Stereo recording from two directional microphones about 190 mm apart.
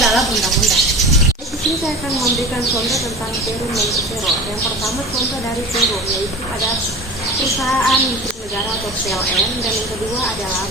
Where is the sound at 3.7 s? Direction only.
Centre (ahead or behind).